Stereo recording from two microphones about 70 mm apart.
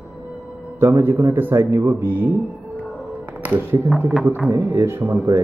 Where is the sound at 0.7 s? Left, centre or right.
Right.